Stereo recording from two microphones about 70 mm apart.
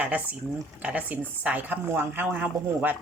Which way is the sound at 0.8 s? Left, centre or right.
Right.